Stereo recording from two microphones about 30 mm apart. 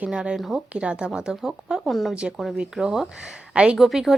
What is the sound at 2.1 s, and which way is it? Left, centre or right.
Speech, right.